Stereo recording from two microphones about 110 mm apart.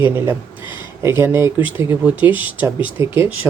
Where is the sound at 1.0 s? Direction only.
20° right (ahead or behind).